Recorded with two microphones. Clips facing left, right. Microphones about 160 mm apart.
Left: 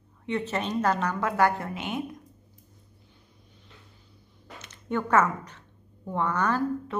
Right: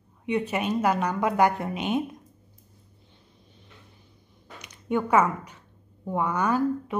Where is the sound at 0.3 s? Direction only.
10° right (ahead or behind).